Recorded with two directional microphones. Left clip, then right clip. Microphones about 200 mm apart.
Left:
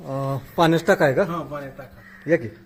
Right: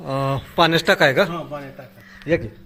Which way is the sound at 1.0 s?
10° right (ahead or behind).